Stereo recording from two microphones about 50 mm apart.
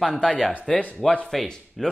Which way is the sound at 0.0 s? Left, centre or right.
Centre.